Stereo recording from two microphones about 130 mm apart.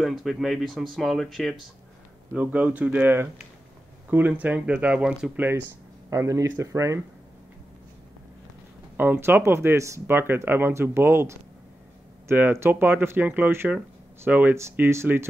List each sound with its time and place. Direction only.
0.0 s speech: centre (ahead or behind)
2.3 s speech: 10° right (ahead or behind)
6.0 s speech: 25° right (ahead or behind)
8.9 s speech: 15° right (ahead or behind)